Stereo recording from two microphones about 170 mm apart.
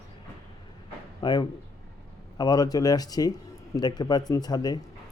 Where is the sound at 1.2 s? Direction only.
25° left (ahead or behind).